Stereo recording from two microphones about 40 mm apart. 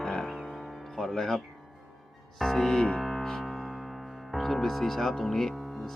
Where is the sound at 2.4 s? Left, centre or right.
Centre.